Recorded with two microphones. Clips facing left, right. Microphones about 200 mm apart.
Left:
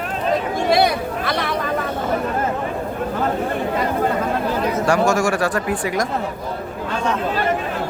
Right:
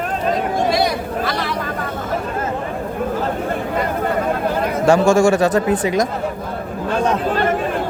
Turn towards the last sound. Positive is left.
turn(degrees=-20)  # may be behind; listen again after turning